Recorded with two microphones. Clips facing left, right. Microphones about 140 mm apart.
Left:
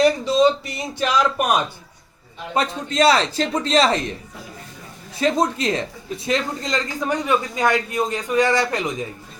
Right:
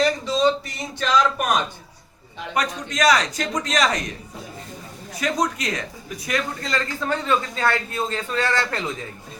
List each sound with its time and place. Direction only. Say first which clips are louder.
0.9 s speech: left 1 dB; 15° left (ahead or behind)
2.6 s a man's voice: left 4 dB; 30° left (ahead or behind)
5.1 s speech: left 4 dB; 30° left (ahead or behind)